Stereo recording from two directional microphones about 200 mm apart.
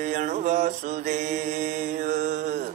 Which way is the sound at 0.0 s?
35° right (ahead or behind).